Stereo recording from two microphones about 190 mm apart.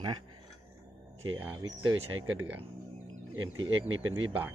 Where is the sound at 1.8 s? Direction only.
90° right.